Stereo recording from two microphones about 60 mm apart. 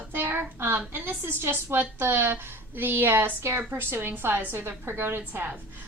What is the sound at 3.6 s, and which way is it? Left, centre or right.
A woman's voice, right.